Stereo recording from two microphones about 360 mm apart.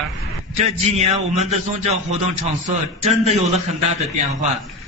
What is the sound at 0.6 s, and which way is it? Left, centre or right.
A man's voice, centre.